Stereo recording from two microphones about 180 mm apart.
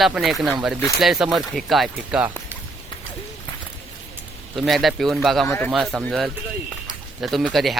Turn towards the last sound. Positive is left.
turn(degrees=0)  # may be behind; listen again after turning